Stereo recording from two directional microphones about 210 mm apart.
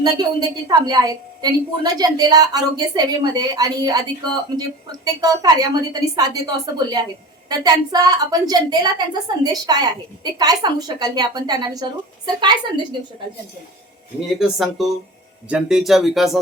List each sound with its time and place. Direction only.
0.0 s a woman's voice: 20° right (ahead or behind)
14.3 s speech: centre (ahead or behind)